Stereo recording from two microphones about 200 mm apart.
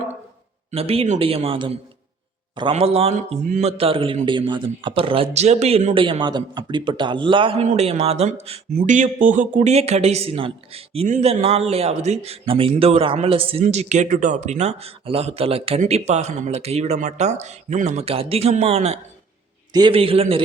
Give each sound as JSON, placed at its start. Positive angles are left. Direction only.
{"t": 0.7, "sound": "a man's voice", "side_deg": -30}